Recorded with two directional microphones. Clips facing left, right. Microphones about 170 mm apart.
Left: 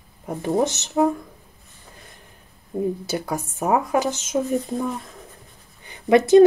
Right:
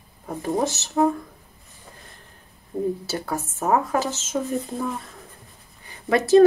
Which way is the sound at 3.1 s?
15° left (ahead or behind).